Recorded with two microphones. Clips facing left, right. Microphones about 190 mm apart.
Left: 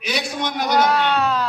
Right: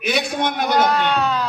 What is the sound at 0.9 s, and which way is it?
Speech, 5° left (ahead or behind).